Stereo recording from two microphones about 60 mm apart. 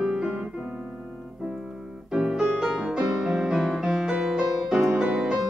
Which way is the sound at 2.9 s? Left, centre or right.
Centre.